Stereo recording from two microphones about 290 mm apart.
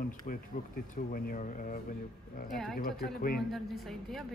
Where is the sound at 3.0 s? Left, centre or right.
Left.